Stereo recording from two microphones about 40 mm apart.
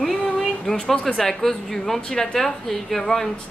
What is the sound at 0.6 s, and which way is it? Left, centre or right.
A woman's voice, centre.